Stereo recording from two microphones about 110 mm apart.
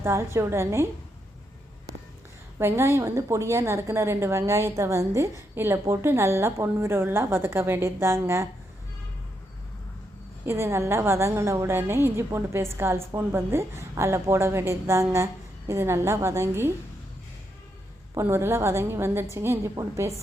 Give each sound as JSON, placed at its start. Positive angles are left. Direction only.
{"t": 0.0, "sound": "a woman's voice", "side_deg": -25}
{"t": 2.6, "sound": "a woman's voice", "side_deg": -20}
{"t": 10.4, "sound": "a woman's voice", "side_deg": -25}
{"t": 18.2, "sound": "a woman's voice", "side_deg": -20}